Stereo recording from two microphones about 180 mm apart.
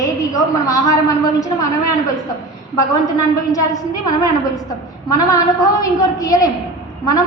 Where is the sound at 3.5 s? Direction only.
20° left (ahead or behind).